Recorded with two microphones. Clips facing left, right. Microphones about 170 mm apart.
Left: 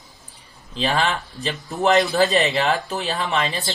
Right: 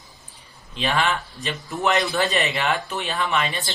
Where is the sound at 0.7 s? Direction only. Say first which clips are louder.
Left 1 dB; 35° left (ahead or behind).